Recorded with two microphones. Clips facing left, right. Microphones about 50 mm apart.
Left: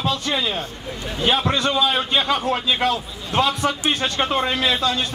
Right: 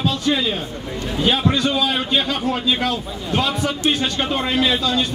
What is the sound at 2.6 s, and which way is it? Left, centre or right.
Speech, centre.